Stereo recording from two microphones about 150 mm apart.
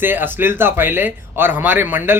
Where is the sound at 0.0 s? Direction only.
15° right (ahead or behind).